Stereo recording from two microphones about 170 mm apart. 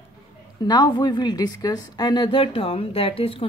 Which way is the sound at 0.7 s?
25° left (ahead or behind).